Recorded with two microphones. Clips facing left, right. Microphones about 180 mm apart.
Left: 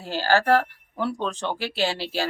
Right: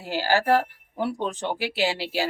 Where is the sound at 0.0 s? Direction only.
15° right (ahead or behind).